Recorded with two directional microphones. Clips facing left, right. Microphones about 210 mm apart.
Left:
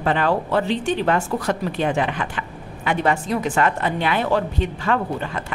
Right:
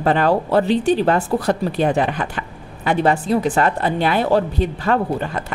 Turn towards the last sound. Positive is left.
turn(degrees=-40)  # may be behind; listen again after turning